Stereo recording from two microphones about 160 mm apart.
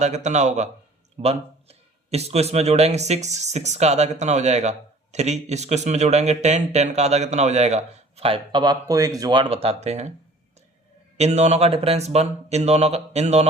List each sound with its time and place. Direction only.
0.0 s speech: 45° right (ahead or behind)
11.2 s speech: 45° right (ahead or behind)